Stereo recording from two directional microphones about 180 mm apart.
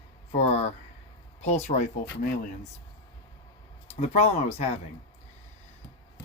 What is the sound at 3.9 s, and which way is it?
Speech, 35° left (ahead or behind).